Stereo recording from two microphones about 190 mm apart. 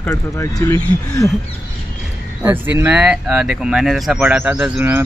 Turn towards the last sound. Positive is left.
turn(degrees=-10)  # may be behind; listen again after turning